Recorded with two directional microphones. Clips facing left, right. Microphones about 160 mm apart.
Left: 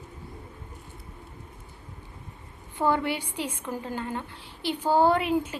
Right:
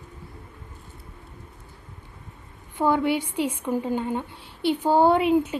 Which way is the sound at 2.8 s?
10° right (ahead or behind).